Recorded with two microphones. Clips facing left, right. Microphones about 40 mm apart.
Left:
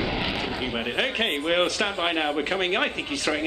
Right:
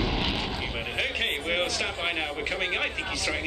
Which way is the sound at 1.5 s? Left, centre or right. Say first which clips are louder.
Left 6 dB; left.